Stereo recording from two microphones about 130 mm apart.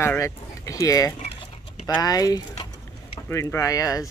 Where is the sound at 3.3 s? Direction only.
20° left (ahead or behind).